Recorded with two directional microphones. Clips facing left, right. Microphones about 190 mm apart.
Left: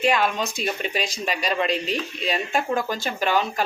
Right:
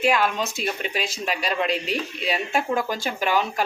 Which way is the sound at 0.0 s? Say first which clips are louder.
Even; 5° right (ahead or behind).